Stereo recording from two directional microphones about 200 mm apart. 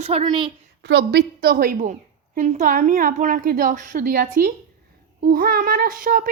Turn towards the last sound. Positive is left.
turn(degrees=-45)  # may be behind; listen again after turning